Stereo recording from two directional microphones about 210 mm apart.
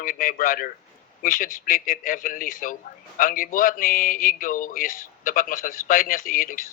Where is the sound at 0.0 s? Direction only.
40° left (ahead or behind).